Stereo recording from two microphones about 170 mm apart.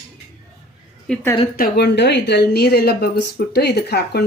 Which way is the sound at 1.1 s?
5° left (ahead or behind).